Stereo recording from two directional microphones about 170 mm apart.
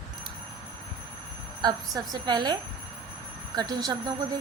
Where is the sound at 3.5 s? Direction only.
20° right (ahead or behind).